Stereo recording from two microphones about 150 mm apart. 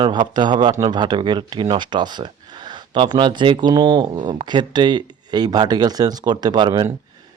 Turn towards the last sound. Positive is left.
turn(degrees=-30)  # may be behind; listen again after turning